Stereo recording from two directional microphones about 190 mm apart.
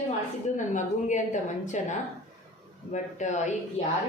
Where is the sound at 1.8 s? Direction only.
35° left (ahead or behind).